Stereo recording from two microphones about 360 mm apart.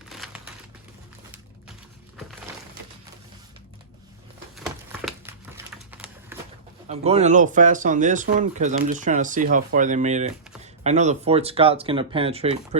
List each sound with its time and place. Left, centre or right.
0.1 s crumpling: centre
4.5 s a sound: centre
6.8 s speech: centre